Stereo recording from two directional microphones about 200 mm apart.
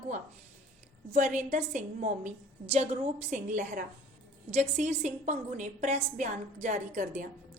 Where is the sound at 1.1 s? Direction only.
35° right (ahead or behind).